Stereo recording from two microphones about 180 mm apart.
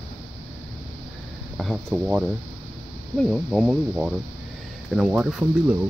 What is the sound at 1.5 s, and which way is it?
Speech, centre (ahead or behind).